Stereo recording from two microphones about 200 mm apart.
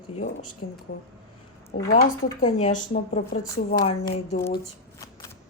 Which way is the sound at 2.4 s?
35° left (ahead or behind).